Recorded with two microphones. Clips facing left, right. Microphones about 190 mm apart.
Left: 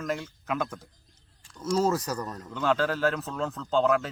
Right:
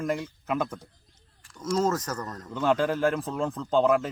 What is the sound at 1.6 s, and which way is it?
Speech, 10° left (ahead or behind).